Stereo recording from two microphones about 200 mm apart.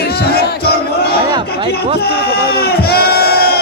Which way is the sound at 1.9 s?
55° left (ahead or behind).